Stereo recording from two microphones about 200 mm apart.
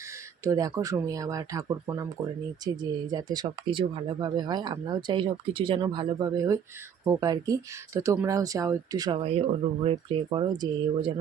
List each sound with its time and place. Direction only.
0.4 s speech: 15° right (ahead or behind)